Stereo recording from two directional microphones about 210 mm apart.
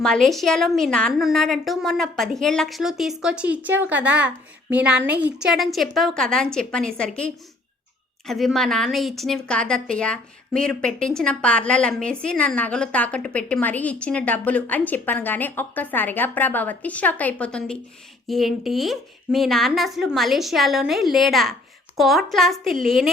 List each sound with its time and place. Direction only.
0.0 s speech: centre (ahead or behind)